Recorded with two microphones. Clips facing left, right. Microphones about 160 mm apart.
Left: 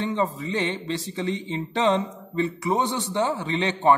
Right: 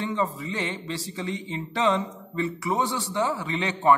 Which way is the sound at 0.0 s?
20° left (ahead or behind).